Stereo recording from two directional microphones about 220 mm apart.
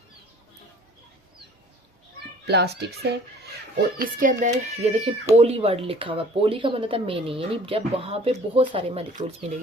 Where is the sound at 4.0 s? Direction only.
35° right (ahead or behind).